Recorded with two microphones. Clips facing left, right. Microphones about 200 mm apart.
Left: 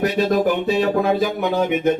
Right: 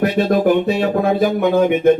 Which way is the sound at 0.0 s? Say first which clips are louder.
Right 3 dB; 55° right (ahead or behind).